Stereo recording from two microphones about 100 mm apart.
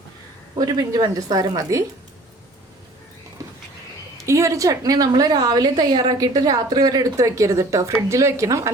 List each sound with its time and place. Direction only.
0.6 s a woman's voice: 40° right (ahead or behind)
3.4 s a sound: 35° right (ahead or behind)
4.3 s a woman's voice: 30° right (ahead or behind)